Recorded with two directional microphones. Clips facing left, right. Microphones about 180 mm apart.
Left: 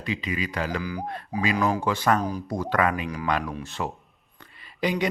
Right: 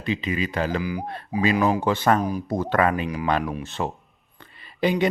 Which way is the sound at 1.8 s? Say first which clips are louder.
Right 3 dB; 30° right (ahead or behind).